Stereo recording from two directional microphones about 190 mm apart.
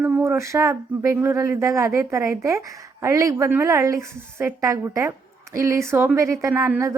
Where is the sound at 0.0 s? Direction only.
15° right (ahead or behind).